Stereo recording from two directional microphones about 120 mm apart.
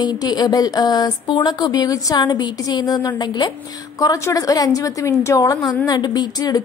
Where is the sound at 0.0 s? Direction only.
35° left (ahead or behind).